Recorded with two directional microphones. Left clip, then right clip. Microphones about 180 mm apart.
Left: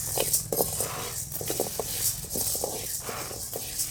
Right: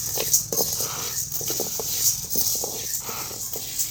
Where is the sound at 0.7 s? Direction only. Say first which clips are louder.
Right 4 dB; 30° left (ahead or behind).